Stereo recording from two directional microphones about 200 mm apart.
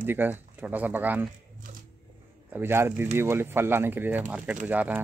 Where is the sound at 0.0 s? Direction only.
10° right (ahead or behind).